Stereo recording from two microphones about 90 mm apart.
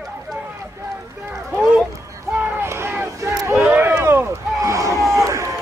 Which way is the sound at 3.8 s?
20° right (ahead or behind).